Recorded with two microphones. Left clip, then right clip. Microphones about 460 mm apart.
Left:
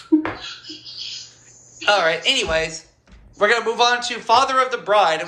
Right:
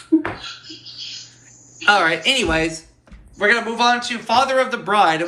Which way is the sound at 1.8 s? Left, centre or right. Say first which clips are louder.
Right 2 dB; centre.